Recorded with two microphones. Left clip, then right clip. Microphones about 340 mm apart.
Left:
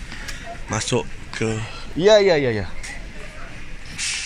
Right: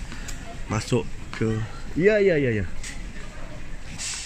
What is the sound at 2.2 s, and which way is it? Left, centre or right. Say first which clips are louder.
Speech: left 3 dB; left.